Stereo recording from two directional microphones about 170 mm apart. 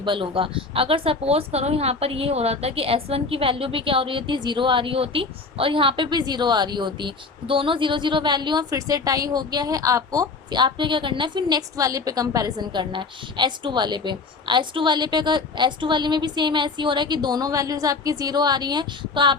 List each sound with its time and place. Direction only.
0.0 s speech: 30° right (ahead or behind)